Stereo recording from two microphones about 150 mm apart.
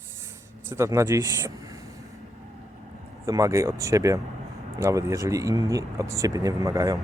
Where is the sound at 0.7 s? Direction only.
20° right (ahead or behind).